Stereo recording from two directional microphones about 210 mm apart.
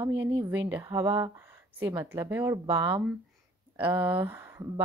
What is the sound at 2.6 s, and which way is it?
Speech, 25° right (ahead or behind).